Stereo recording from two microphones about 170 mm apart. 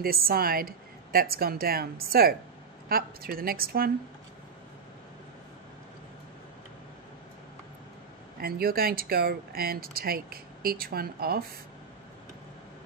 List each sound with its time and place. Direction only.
0.0 s speech: 60° right (ahead or behind)
8.4 s speech: 60° right (ahead or behind)